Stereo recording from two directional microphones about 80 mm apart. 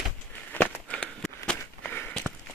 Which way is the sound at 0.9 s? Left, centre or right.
Centre.